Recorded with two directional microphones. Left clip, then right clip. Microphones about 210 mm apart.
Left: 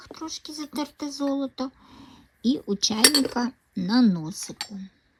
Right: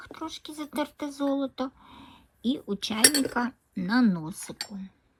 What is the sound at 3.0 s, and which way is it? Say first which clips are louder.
Cutlery: left 3 dB; centre (ahead or behind).